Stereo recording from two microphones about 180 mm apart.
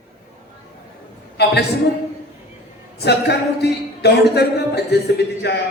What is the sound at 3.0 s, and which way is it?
A man's voice, 65° left (ahead or behind).